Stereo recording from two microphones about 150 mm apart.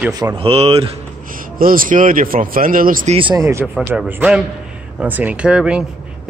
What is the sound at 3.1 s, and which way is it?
Speech, 35° right (ahead or behind).